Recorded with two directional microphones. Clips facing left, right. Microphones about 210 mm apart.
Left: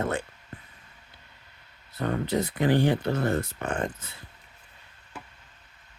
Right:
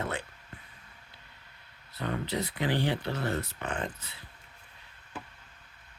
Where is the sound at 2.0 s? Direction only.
45° left (ahead or behind).